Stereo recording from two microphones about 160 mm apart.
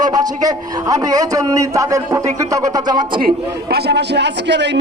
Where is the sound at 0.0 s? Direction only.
25° right (ahead or behind).